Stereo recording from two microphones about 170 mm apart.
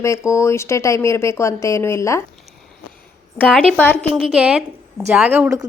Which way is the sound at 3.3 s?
5° left (ahead or behind).